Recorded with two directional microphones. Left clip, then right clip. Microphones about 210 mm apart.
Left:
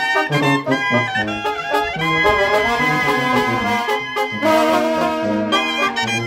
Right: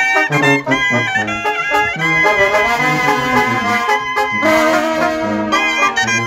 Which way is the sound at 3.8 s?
10° right (ahead or behind).